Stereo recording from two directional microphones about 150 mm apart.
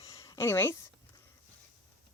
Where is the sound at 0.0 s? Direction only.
20° left (ahead or behind).